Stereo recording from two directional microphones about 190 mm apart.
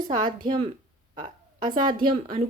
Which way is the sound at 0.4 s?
25° right (ahead or behind).